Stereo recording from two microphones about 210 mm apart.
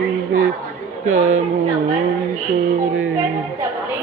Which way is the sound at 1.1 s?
35° right (ahead or behind).